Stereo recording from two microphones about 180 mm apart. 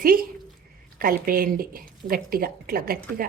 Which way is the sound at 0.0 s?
55° right (ahead or behind).